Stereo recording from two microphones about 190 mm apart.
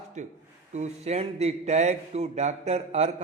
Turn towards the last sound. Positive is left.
turn(degrees=-35)  # may be behind; listen again after turning